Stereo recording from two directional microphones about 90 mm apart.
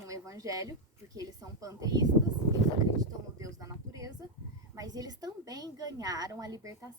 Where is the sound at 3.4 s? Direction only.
40° right (ahead or behind).